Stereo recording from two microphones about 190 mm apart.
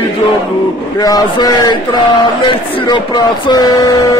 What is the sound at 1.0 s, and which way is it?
Speech, 20° left (ahead or behind).